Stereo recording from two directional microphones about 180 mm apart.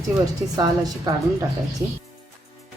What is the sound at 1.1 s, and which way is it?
Speech, 20° right (ahead or behind).